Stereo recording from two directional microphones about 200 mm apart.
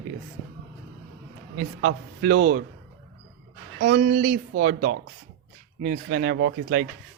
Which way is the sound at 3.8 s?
45° right (ahead or behind).